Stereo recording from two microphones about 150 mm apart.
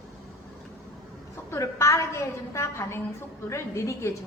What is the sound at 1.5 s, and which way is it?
A woman's voice, 20° left (ahead or behind).